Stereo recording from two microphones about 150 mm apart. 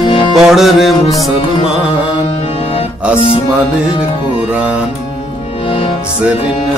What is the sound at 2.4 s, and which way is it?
Music, 40° left (ahead or behind).